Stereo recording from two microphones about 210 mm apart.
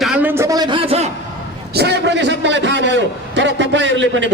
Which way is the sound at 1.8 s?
55° right (ahead or behind).